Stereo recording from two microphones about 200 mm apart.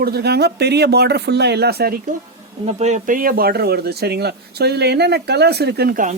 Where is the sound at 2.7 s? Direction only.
35° right (ahead or behind).